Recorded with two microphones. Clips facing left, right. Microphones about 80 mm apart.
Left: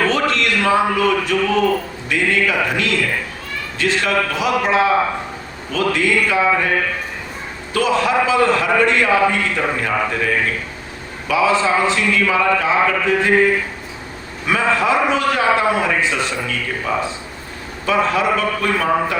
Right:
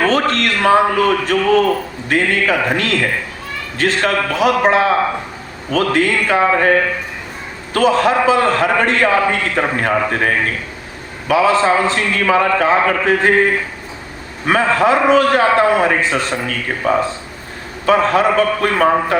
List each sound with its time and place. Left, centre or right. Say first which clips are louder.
0.0 s a man's voice: right 2 dB; right